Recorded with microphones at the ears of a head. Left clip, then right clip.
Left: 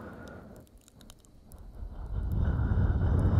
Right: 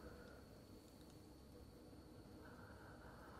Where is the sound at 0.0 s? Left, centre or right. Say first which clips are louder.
Left 13 dB; left.